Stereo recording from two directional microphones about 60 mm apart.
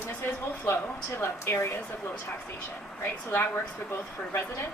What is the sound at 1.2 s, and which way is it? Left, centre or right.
Speech, left.